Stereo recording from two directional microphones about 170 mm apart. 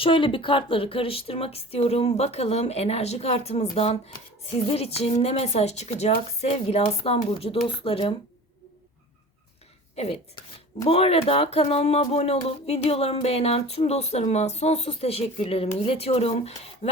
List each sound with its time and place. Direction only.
0.0 s speech: 30° left (ahead or behind)
9.9 s speech: 35° left (ahead or behind)